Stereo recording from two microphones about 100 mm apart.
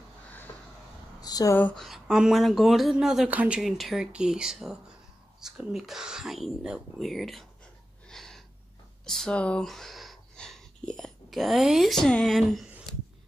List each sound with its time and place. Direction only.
0.5 s a sound: 40° left (ahead or behind)
1.5 s speech: 20° left (ahead or behind)
1.8 s speech: 5° right (ahead or behind)
8.1 s gasp: 5° left (ahead or behind)
9.0 s speech: 5° left (ahead or behind)